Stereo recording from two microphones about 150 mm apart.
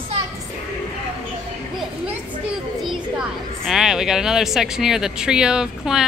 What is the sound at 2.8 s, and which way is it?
Speech, centre (ahead or behind).